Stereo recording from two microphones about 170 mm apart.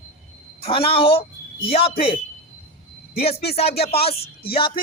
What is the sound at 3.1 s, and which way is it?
Speech, 35° left (ahead or behind).